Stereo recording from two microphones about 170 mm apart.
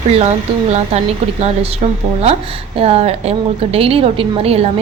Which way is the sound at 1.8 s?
40° right (ahead or behind).